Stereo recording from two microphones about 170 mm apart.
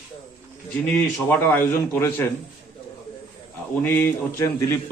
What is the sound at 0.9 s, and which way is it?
A man's voice, 5° left (ahead or behind).